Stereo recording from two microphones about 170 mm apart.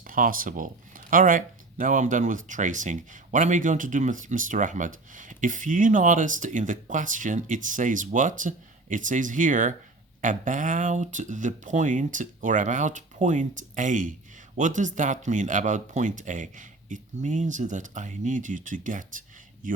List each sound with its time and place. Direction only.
0.0 s speech: 55° right (ahead or behind)